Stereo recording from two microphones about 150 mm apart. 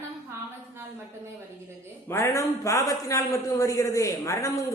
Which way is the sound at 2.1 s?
20° left (ahead or behind).